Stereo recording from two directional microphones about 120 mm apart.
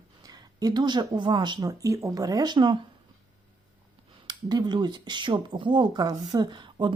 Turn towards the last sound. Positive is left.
turn(degrees=-40)  # may be behind; listen again after turning